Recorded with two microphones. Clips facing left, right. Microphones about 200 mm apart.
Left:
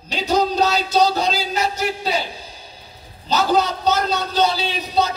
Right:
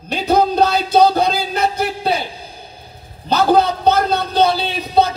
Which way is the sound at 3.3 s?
55° right (ahead or behind).